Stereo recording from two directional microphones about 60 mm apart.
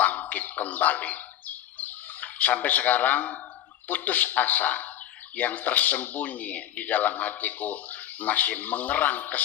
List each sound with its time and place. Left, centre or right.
0.0 s bird: left
3.8 s speech: left